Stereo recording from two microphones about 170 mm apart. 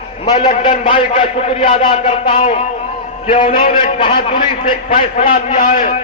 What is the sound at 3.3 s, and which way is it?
A man's voice, 30° left (ahead or behind).